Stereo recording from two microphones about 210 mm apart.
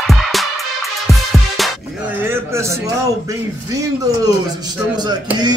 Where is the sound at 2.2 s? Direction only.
10° right (ahead or behind).